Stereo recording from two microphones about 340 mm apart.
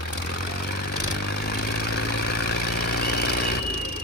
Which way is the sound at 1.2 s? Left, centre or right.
Left.